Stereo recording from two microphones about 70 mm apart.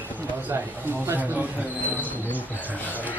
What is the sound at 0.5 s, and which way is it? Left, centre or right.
Speech, right.